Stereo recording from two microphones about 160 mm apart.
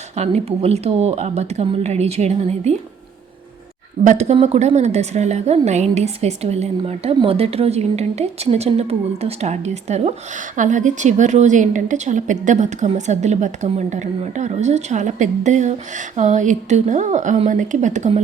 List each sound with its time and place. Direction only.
0.2 s speech: 40° right (ahead or behind)
4.0 s a woman's voice: 45° right (ahead or behind)